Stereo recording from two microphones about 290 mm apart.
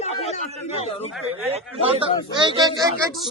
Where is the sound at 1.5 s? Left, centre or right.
Centre.